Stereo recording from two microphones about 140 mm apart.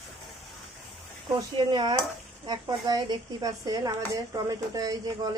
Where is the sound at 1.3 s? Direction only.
30° right (ahead or behind).